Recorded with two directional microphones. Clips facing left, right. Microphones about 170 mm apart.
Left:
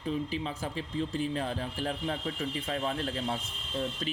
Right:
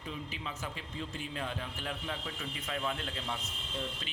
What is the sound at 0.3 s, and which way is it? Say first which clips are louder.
Speech: left 7 dB; 35° left (ahead or behind).